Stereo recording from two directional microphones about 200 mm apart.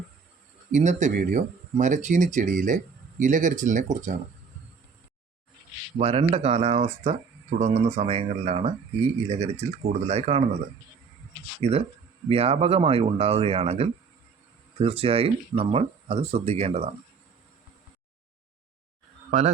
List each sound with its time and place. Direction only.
0.7 s speech: 35° right (ahead or behind)
6.0 s speech: 30° right (ahead or behind)
11.6 s speech: 30° right (ahead or behind)